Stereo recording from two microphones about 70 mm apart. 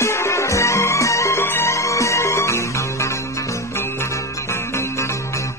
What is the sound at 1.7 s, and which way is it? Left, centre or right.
Music, left.